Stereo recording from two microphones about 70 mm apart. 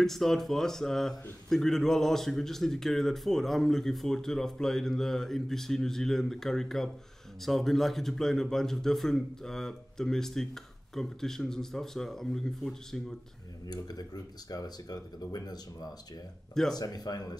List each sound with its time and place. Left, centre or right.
0.0 s a man's voice: centre
13.7 s speech: left